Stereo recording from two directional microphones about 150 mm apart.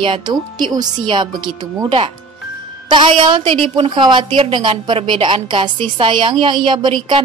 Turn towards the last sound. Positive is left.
turn(degrees=-35)  # may be behind; listen again after turning